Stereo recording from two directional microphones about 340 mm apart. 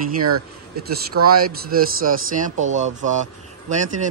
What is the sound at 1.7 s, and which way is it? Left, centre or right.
Speech, right.